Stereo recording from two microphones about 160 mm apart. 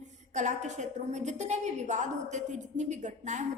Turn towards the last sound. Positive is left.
turn(degrees=-50)  # may be behind; listen again after turning